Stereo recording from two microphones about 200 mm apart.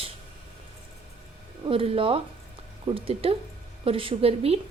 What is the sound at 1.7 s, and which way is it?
Speech, 25° right (ahead or behind).